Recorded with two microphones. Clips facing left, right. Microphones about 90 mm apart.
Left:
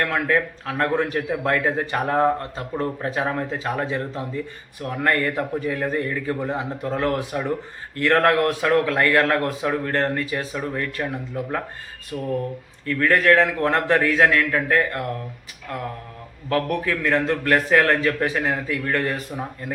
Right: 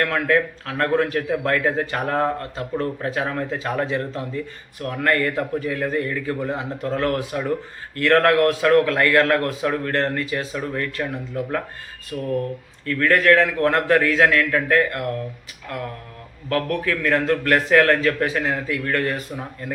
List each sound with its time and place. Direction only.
0.0 s a man's voice: 20° left (ahead or behind)
16.5 s a man's voice: 20° left (ahead or behind)